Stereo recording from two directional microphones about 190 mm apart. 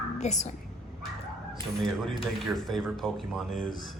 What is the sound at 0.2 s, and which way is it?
Speech, 40° left (ahead or behind).